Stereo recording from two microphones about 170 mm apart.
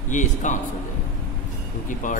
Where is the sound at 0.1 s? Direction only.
45° left (ahead or behind).